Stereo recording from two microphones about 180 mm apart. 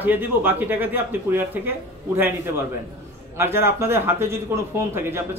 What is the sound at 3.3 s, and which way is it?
Speech, 15° right (ahead or behind).